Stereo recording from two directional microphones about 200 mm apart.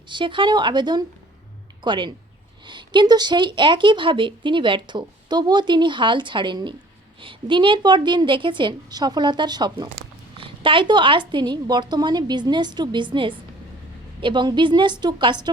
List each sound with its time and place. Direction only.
0.1 s a woman's voice: 25° right (ahead or behind)